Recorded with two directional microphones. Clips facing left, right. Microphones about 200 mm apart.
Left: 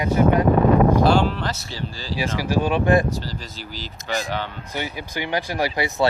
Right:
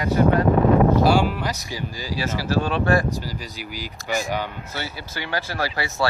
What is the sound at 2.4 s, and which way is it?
Speech, 15° left (ahead or behind).